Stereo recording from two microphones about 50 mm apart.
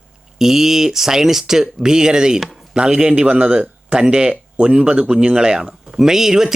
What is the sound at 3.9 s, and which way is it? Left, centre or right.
Speech, centre.